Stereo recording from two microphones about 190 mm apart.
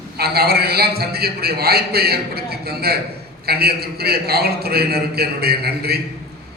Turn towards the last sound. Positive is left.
turn(degrees=-55)  # may be behind; listen again after turning